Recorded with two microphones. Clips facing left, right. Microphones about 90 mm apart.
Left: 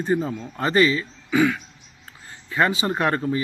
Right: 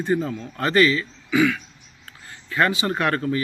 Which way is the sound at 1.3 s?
40° left (ahead or behind).